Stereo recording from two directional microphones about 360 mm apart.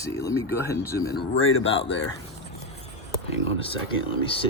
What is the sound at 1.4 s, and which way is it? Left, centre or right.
Speech, left.